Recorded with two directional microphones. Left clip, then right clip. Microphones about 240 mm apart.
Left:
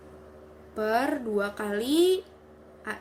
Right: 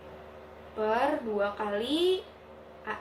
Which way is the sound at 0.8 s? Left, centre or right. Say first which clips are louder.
Left 1 dB; left.